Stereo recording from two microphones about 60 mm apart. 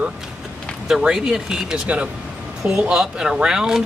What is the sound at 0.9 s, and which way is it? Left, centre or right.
Speech, centre.